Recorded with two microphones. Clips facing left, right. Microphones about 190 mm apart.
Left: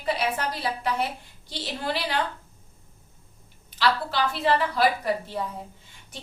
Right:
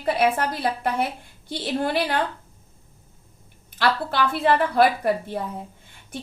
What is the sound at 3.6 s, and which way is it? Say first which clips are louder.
A woman's voice: right 2 dB; 55° right (ahead or behind).